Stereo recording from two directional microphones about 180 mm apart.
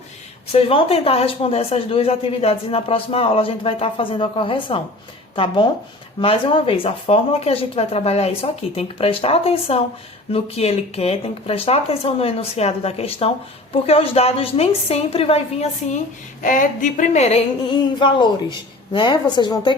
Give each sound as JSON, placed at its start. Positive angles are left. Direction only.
{"t": 0.5, "sound": "speech", "side_deg": 35}
{"t": 16.4, "sound": "speech", "side_deg": 45}